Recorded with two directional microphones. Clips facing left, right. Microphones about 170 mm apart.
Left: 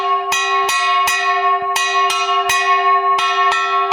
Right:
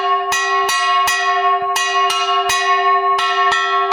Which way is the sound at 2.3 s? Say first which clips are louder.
Even; 15° left (ahead or behind).